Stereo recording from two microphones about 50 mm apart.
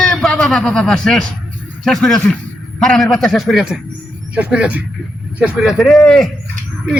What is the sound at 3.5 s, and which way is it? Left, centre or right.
Speech, centre.